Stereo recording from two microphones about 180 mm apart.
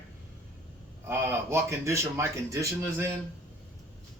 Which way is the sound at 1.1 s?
15° right (ahead or behind).